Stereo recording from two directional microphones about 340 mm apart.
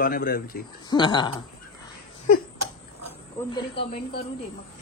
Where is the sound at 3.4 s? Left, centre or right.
Centre.